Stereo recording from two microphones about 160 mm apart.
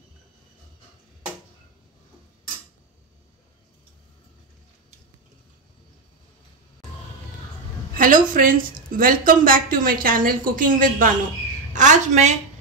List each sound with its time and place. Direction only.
7.9 s a woman's voice: 60° right (ahead or behind)